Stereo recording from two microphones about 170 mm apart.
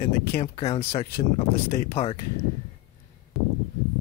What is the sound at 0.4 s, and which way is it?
Speech, 35° left (ahead or behind).